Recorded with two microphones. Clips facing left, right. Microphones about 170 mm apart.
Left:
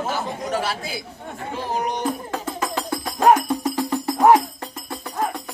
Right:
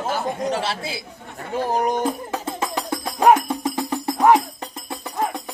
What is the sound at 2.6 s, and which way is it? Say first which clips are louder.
Music: even; 20° right (ahead or behind).